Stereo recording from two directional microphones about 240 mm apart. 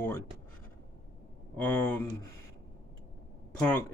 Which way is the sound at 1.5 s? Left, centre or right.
Centre.